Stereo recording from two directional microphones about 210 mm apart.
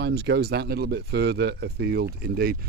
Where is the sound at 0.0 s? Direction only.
50° right (ahead or behind).